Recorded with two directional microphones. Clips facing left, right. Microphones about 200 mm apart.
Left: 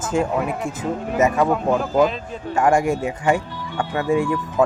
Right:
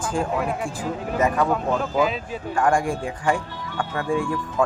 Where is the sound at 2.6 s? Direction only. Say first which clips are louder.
Left 4 dB; 25° left (ahead or behind).